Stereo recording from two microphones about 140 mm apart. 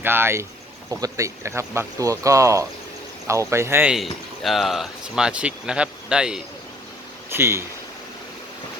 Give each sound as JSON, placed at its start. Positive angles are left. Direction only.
{"t": 0.0, "sound": "speech", "side_deg": -15}
{"t": 3.9, "sound": "speech", "side_deg": 0}
{"t": 7.3, "sound": "speech", "side_deg": -20}